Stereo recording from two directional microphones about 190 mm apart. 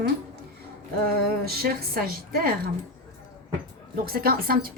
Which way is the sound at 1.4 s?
55° right (ahead or behind).